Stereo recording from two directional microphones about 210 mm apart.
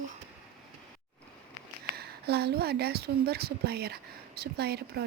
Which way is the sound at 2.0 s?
50° right (ahead or behind).